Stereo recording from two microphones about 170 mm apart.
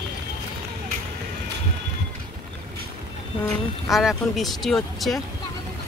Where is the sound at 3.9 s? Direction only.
Centre (ahead or behind).